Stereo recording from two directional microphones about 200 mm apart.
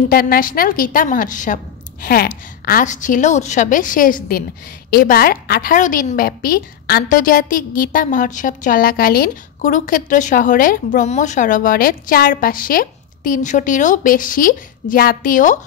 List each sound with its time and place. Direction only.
0.1 s a woman's voice: 45° left (ahead or behind)